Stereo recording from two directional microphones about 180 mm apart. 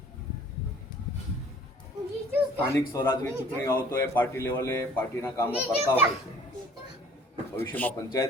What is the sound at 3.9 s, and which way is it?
A man's voice, 10° left (ahead or behind).